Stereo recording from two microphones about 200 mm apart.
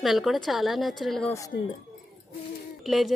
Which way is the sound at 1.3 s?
15° left (ahead or behind).